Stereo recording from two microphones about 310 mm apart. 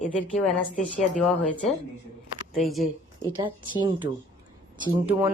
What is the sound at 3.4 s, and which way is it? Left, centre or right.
Speech, centre.